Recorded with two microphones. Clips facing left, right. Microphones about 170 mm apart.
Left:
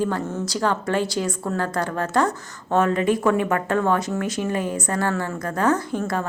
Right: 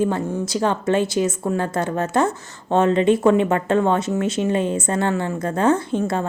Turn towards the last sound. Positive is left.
turn(degrees=-25)  # may be behind; listen again after turning